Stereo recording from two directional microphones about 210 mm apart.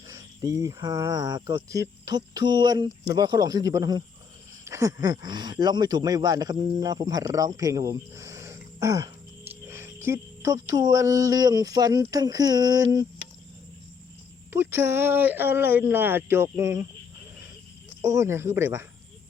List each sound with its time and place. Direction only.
0.1 s speech: 15° right (ahead or behind)
14.5 s speech: 10° right (ahead or behind)
18.0 s speech: 15° right (ahead or behind)